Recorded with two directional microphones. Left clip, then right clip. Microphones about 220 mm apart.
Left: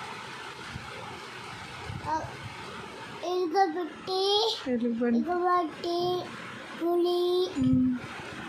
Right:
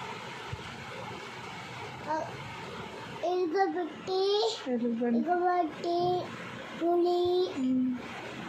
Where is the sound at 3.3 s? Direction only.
20° left (ahead or behind).